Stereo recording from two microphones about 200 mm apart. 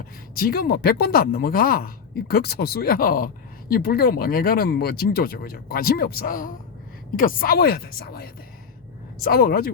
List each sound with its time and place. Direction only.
0.3 s speech: 50° left (ahead or behind)